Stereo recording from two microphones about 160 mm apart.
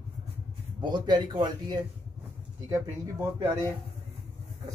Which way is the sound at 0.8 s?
25° right (ahead or behind).